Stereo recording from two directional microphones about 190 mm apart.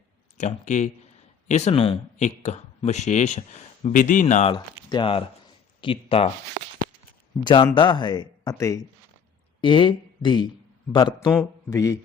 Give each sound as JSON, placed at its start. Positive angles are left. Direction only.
{"t": 0.3, "sound": "speech", "side_deg": 40}
{"t": 4.5, "sound": "speech", "side_deg": 25}
{"t": 7.4, "sound": "speech", "side_deg": 25}
{"t": 9.6, "sound": "speech", "side_deg": 25}